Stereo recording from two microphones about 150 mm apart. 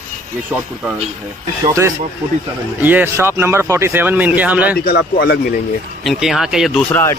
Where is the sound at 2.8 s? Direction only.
15° right (ahead or behind).